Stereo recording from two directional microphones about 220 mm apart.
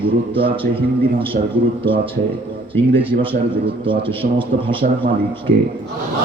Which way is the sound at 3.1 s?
45° right (ahead or behind).